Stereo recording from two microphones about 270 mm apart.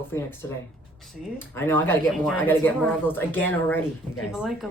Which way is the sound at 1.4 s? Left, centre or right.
Centre.